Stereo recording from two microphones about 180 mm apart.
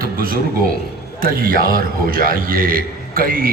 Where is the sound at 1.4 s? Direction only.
55° right (ahead or behind).